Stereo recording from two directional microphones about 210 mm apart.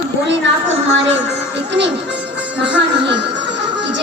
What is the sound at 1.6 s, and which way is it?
Speech, 55° right (ahead or behind).